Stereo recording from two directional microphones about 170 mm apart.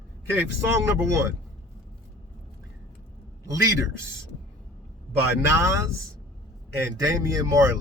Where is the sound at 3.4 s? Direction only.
20° right (ahead or behind).